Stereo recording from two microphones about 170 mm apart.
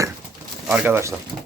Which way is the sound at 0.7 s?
10° right (ahead or behind).